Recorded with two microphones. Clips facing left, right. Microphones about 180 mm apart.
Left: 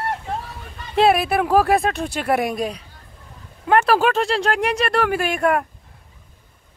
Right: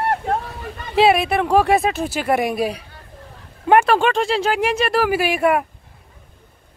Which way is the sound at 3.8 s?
Centre (ahead or behind).